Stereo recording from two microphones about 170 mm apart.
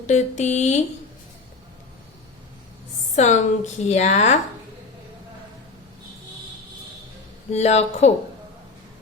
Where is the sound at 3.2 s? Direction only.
45° left (ahead or behind).